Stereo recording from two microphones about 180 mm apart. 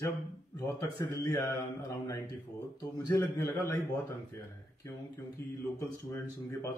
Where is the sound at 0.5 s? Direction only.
20° left (ahead or behind).